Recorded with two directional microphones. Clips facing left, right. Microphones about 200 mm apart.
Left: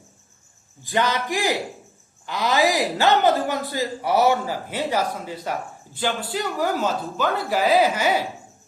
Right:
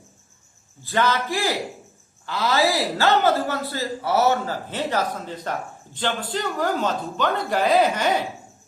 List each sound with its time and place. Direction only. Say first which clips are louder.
0.8 s a woman's voice: right 1 dB; 15° left (ahead or behind)